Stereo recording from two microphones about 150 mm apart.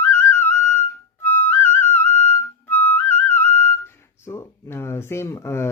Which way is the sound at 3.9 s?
15° left (ahead or behind).